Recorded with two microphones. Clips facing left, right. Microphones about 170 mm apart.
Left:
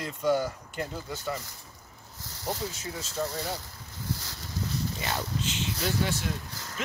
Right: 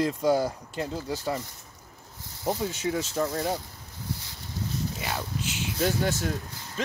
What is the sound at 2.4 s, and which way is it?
Speech, 80° right.